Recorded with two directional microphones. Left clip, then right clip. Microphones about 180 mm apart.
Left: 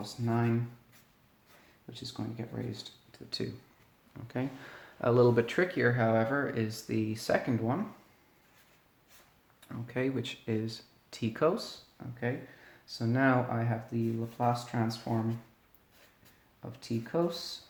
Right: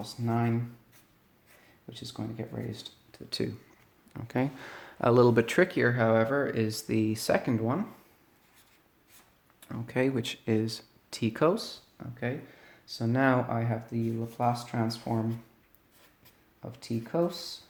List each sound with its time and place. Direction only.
0.0 s speech: 40° right (ahead or behind)
1.9 s speech: 40° right (ahead or behind)
9.6 s speech: 50° right (ahead or behind)
16.7 s speech: 40° right (ahead or behind)